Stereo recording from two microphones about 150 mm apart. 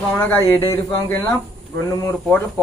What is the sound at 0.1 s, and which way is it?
A man's voice, 10° left (ahead or behind).